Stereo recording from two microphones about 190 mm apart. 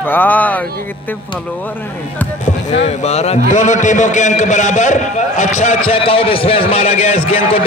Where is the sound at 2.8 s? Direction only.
35° left (ahead or behind).